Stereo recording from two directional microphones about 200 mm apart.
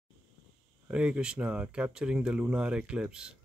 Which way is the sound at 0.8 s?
5° right (ahead or behind).